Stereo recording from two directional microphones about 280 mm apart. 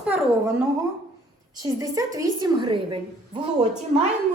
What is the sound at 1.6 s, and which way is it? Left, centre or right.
A woman's voice, centre.